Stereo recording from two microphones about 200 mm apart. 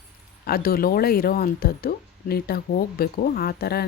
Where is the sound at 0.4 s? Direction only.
50° left (ahead or behind).